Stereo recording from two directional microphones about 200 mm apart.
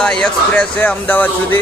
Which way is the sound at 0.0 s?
5° left (ahead or behind).